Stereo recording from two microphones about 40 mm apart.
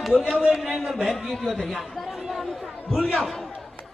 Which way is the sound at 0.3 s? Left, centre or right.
Centre.